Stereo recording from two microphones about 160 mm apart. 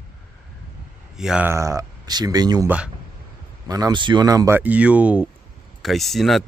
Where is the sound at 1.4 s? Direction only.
20° right (ahead or behind).